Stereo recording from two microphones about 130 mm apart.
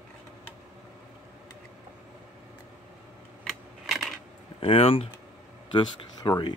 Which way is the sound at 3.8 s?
Centre (ahead or behind).